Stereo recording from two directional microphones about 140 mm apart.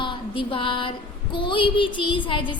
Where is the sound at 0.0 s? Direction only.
35° left (ahead or behind).